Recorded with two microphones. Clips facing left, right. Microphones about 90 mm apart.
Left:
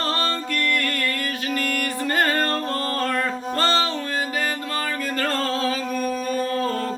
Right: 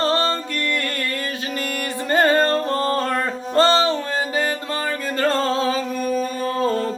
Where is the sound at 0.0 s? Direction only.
25° right (ahead or behind).